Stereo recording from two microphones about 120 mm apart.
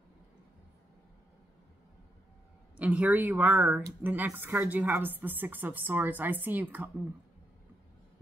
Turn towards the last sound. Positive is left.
turn(degrees=-15)  # may be behind; listen again after turning